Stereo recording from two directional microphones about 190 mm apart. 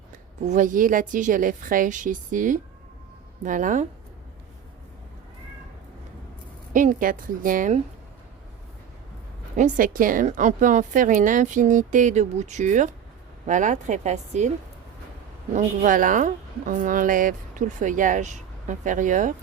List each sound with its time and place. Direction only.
0.4 s a woman's voice: 40° right (ahead or behind)
6.7 s a woman's voice: 45° right (ahead or behind)
9.6 s a woman's voice: 45° right (ahead or behind)
15.5 s a woman's voice: 45° right (ahead or behind)